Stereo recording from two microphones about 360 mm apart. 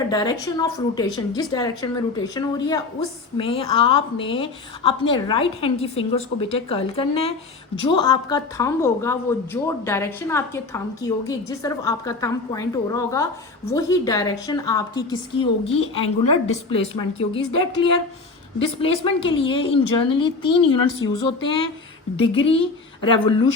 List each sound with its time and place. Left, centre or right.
0.1 s speech: centre
21.4 s speech: left
22.1 s speech: centre